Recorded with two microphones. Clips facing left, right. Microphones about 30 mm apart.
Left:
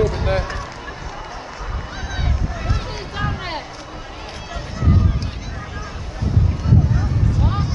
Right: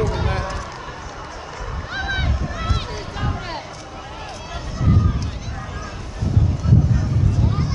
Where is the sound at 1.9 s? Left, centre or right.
Right.